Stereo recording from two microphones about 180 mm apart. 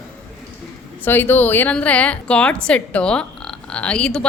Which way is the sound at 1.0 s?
10° left (ahead or behind).